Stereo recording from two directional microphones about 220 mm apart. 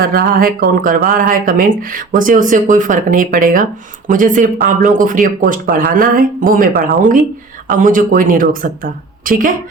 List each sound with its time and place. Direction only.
0.0 s speech: 40° right (ahead or behind)